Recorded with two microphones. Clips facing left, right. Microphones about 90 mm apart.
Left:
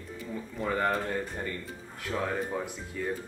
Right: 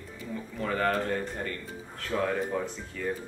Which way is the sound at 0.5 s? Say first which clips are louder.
Right 1 dB; 15° left (ahead or behind).